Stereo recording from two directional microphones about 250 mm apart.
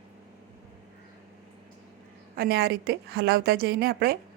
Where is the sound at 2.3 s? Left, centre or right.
Right.